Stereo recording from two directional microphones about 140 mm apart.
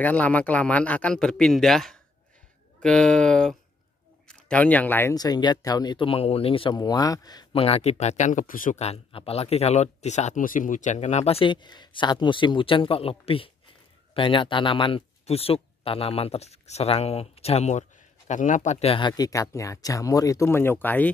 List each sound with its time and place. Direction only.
0.0 s speech: 10° left (ahead or behind)
5.1 s speech: 30° left (ahead or behind)
7.5 s speech: 45° left (ahead or behind); by 8.7 s 75° left (ahead or behind)
8.7 s speech: 45° left (ahead or behind); by 18.8 s 65° left (ahead or behind)
18.8 s speech: 40° left (ahead or behind); by 21.1 s 15° left (ahead or behind)